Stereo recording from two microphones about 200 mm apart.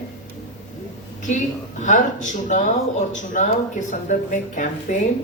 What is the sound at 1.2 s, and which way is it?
A woman's voice, 40° left (ahead or behind).